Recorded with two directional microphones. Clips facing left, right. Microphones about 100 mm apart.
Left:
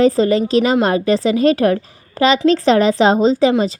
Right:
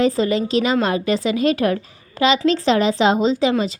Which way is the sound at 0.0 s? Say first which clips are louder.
Left 5 dB; 35° left (ahead or behind).